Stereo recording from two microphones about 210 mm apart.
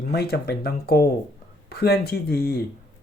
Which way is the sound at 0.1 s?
50° left (ahead or behind).